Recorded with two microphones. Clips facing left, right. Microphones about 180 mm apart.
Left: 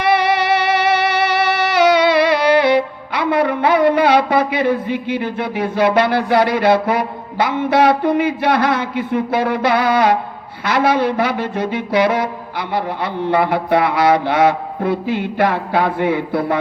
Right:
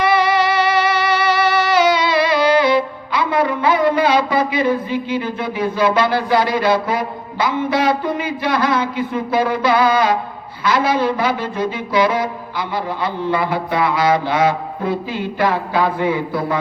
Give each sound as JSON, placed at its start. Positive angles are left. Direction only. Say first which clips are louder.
{"t": 0.2, "sound": "music", "louder": "even", "side_deg": 65}
{"t": 10.6, "sound": "mantra", "louder": "left 1 dB", "side_deg": 65}